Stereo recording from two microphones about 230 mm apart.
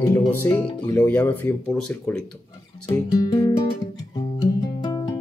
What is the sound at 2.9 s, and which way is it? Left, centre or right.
Speech, centre.